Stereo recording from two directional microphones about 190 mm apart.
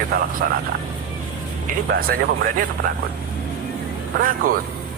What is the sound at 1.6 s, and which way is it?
Speech, 50° right (ahead or behind).